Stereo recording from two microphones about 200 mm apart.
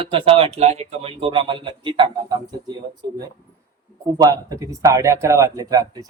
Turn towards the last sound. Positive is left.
turn(degrees=-15)  # may be behind; listen again after turning